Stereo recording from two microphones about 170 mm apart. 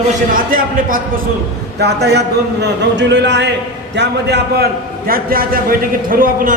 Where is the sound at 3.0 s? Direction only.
90° right; by 6.5 s 55° right (ahead or behind).